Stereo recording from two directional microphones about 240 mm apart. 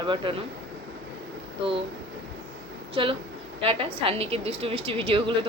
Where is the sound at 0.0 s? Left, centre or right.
Centre.